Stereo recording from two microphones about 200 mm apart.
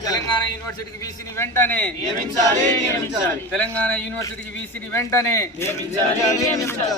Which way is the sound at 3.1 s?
5° left (ahead or behind).